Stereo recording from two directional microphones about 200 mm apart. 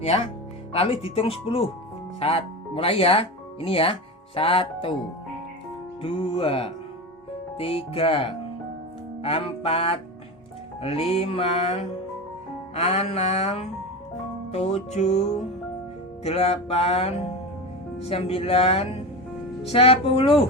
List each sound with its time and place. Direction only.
0.0 s music: 30° left (ahead or behind)
2.1 s speech: 30° left (ahead or behind)
4.4 s music: 25° left (ahead or behind)
6.0 s music: 25° left (ahead or behind)
16.2 s music: 30° left (ahead or behind)